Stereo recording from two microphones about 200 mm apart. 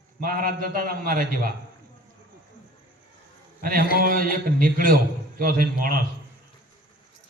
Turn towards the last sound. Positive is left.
turn(degrees=-45)  # may be behind; listen again after turning